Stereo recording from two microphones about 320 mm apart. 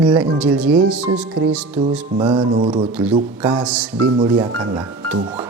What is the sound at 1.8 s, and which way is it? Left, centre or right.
Speech, centre.